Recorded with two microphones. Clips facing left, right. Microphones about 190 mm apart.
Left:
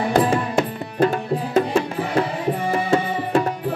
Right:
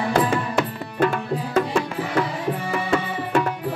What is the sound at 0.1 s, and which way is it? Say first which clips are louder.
Music: left 3 dB; 35° left (ahead or behind).